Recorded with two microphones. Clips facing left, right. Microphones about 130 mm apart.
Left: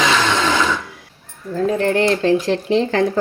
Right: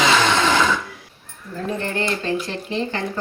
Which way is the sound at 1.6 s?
90° left.